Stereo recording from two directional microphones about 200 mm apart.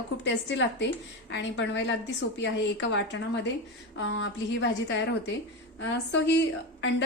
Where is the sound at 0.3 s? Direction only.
65° left (ahead or behind).